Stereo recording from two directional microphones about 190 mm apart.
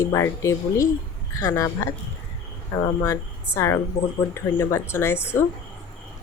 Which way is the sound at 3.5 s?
15° left (ahead or behind).